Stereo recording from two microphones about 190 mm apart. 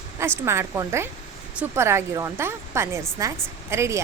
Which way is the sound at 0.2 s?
15° right (ahead or behind).